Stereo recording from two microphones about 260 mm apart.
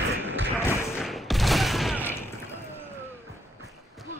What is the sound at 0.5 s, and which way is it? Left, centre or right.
Thump, centre.